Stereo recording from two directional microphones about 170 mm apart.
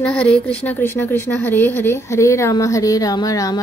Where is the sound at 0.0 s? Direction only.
5° left (ahead or behind).